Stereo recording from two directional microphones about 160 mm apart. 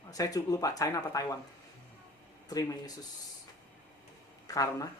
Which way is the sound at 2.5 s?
25° left (ahead or behind).